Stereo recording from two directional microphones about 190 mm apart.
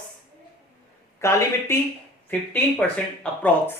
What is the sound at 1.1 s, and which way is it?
Speech, 15° left (ahead or behind).